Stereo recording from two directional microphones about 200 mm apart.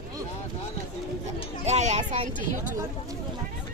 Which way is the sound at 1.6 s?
35° right (ahead or behind).